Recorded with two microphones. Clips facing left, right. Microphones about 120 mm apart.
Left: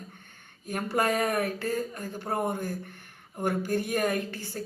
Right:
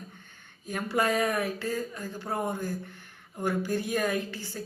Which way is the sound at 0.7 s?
50° left (ahead or behind).